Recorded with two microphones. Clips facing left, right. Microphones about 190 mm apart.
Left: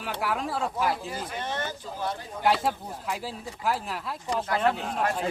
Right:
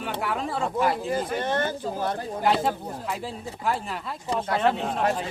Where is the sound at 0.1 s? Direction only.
Centre (ahead or behind).